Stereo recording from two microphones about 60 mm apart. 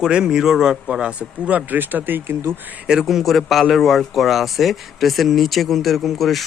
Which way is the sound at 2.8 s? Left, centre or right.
Centre.